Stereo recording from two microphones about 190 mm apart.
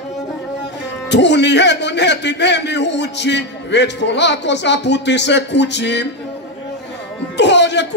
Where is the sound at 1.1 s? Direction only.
65° left (ahead or behind).